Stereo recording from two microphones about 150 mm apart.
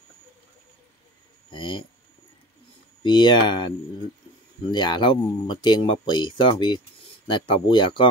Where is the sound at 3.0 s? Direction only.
30° left (ahead or behind).